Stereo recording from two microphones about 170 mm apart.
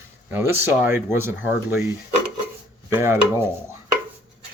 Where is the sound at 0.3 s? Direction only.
10° right (ahead or behind).